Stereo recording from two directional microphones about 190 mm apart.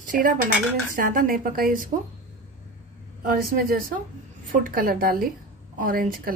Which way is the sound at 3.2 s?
50° right (ahead or behind).